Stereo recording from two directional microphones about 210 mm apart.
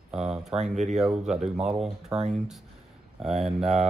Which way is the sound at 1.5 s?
5° right (ahead or behind).